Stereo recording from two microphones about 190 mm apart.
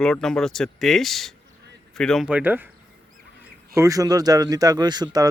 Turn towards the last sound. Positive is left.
turn(degrees=-20)  # may be behind; listen again after turning